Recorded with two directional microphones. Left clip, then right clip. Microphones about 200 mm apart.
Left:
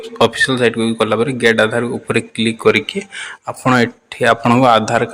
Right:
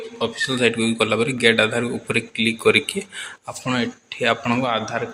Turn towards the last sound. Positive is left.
turn(degrees=50)  # may be behind; listen again after turning